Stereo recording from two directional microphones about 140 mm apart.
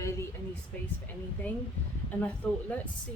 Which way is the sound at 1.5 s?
10° left (ahead or behind).